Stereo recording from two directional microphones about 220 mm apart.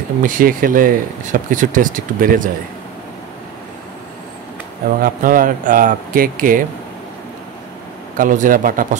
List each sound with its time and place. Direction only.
0.2 s speech: 40° right (ahead or behind)
5.0 s speech: 40° right (ahead or behind)
8.2 s speech: 35° right (ahead or behind)